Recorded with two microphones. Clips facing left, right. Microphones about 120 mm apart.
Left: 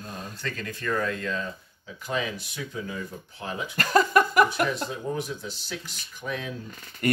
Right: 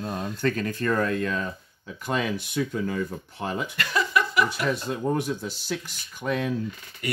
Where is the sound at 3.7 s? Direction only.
45° left (ahead or behind).